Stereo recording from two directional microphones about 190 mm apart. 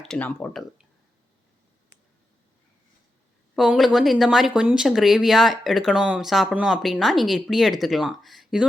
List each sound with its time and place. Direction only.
0.0 s speech: 5° left (ahead or behind)
3.5 s speech: centre (ahead or behind)